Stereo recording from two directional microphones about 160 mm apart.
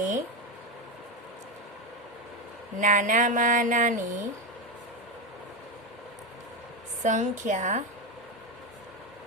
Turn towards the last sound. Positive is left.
turn(degrees=-50)  # may be behind; listen again after turning